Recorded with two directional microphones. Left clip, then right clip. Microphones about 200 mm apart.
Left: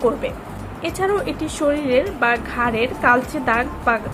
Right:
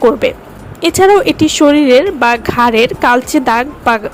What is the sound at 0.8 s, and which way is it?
A woman's voice, 55° right (ahead or behind).